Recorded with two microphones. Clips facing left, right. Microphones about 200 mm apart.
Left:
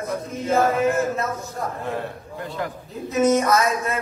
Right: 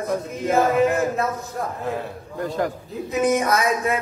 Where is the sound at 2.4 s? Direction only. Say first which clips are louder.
Right 5 dB; 45° right (ahead or behind).